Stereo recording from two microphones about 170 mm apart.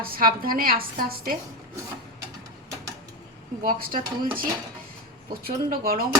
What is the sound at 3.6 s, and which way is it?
Speech, 55° right (ahead or behind).